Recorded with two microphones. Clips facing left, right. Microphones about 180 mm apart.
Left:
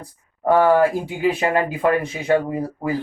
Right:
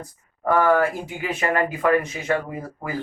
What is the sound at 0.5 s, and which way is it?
Speech, 30° left (ahead or behind).